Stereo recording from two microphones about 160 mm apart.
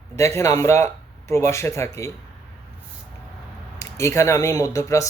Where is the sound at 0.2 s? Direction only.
15° left (ahead or behind).